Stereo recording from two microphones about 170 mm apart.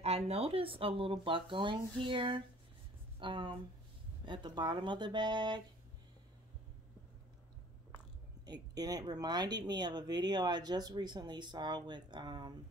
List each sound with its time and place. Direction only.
0.0 s speech: 35° right (ahead or behind)
8.5 s speech: 25° right (ahead or behind)